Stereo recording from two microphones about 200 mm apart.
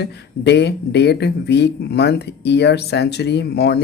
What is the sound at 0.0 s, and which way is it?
Speech, 55° left (ahead or behind).